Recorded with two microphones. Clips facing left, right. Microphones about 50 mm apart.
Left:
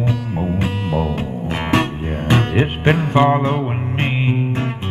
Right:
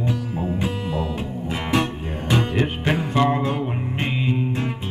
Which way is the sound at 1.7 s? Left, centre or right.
Left.